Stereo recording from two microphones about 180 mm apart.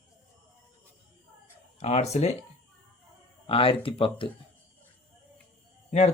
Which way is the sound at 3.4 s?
30° left (ahead or behind).